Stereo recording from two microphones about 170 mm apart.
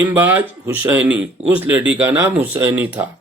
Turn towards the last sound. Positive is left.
turn(degrees=-10)  # may be behind; listen again after turning